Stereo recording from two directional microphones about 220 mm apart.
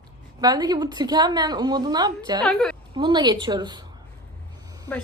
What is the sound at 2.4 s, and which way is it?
Speech, 5° left (ahead or behind).